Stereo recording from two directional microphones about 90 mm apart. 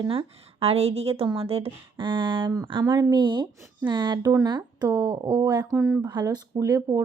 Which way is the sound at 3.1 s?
60° right (ahead or behind).